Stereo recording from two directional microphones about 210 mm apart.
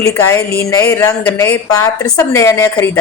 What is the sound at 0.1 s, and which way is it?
A woman's voice, 15° left (ahead or behind).